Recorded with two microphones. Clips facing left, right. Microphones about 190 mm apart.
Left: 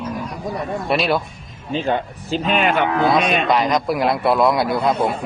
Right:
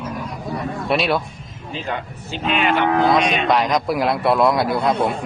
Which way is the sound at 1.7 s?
30° left (ahead or behind).